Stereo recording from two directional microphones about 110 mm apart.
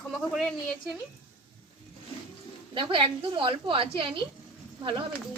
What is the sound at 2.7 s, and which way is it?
Speech, 50° right (ahead or behind).